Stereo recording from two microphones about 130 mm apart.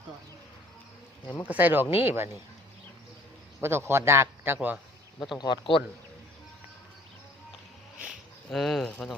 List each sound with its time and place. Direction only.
1.5 s a man's voice: 15° right (ahead or behind)
3.6 s a man's voice: 20° right (ahead or behind)
5.4 s speech: 40° left (ahead or behind)
8.4 s speech: centre (ahead or behind)